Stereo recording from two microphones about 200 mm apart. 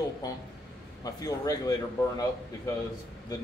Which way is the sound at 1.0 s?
20° left (ahead or behind).